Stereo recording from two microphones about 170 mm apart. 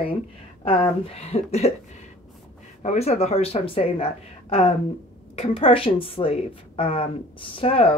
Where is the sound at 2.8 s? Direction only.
40° left (ahead or behind).